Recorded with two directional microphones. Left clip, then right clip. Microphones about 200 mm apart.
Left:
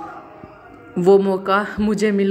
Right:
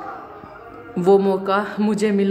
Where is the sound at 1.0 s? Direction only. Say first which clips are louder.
Left 1 dB; 10° left (ahead or behind).